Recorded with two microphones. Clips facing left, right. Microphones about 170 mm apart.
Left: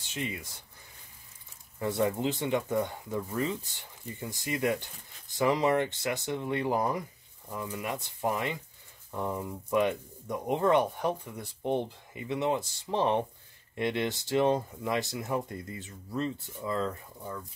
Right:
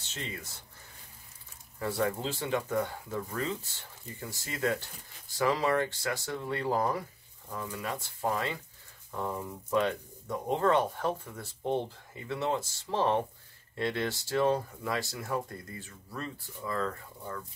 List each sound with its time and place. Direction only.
0.0 s speech: 15° left (ahead or behind)
1.8 s speech: 20° left (ahead or behind)